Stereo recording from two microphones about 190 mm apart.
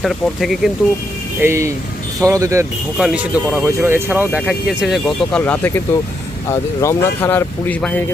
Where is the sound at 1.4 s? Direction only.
15° right (ahead or behind); by 8.0 s 10° left (ahead or behind).